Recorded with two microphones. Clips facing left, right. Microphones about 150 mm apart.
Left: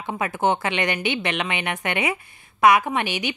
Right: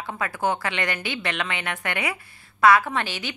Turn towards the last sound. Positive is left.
turn(degrees=15)  # may be behind; listen again after turning